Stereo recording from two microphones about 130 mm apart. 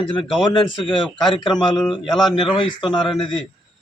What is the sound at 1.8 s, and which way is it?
Speech, centre (ahead or behind).